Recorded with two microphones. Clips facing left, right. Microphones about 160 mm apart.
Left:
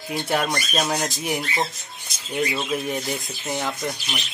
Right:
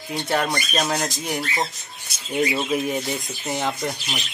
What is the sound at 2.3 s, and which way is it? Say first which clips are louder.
Speech: right 3 dB; 10° right (ahead or behind).